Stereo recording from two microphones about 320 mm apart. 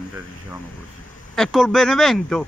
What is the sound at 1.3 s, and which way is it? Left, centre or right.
Speech, centre.